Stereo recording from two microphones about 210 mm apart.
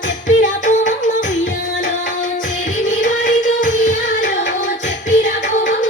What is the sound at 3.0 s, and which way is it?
Music, 35° left (ahead or behind).